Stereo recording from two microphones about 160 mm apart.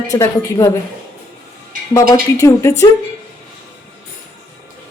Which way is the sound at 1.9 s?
20° left (ahead or behind).